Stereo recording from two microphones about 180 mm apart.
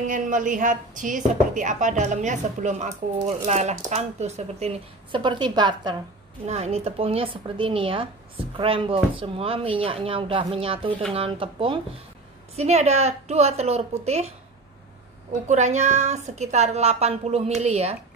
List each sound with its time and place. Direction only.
0.0 s a woman's voice: 45° right (ahead or behind); by 5.9 s 25° right (ahead or behind)
6.4 s a woman's voice: 35° right (ahead or behind)
15.4 s a woman's voice: 40° right (ahead or behind)